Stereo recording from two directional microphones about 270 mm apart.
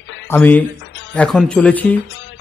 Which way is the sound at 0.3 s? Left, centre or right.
Centre.